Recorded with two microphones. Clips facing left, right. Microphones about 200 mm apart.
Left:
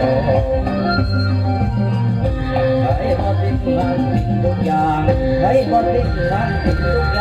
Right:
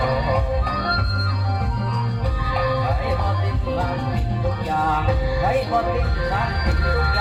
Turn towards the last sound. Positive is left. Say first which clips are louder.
# left 7 dB
turn(degrees=35)  # may be behind; listen again after turning